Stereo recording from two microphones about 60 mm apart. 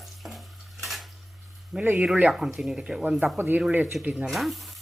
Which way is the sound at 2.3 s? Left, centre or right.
Centre.